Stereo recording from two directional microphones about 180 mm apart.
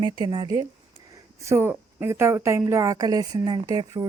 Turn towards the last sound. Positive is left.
turn(degrees=-20)  # may be behind; listen again after turning